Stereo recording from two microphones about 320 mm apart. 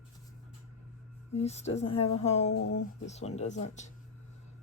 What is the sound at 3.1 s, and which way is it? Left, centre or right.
Speech, left.